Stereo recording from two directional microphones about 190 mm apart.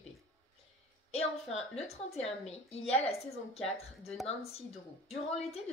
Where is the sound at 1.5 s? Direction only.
35° left (ahead or behind).